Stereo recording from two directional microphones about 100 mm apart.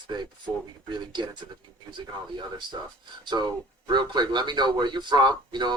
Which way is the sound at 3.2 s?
45° right (ahead or behind).